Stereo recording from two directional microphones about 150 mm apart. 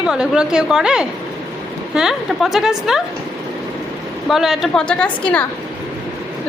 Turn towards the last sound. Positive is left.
turn(degrees=10)  # may be behind; listen again after turning